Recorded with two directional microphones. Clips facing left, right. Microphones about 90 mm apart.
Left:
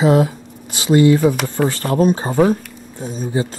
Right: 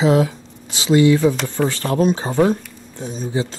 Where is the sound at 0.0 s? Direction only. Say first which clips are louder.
Left 2 dB; 45° left (ahead or behind).